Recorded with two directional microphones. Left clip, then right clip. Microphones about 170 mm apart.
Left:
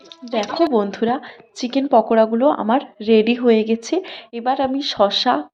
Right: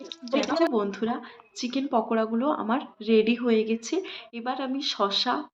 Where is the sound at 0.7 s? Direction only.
40° left (ahead or behind).